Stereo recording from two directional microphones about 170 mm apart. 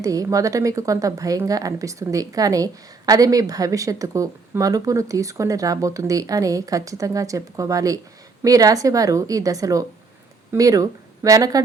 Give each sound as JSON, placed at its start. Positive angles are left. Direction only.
{"t": 0.0, "sound": "a woman's voice", "side_deg": -20}